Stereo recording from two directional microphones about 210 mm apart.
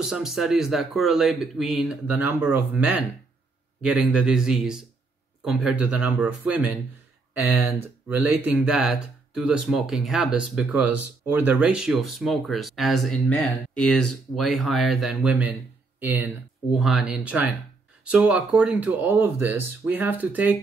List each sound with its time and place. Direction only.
0.0 s speech: centre (ahead or behind)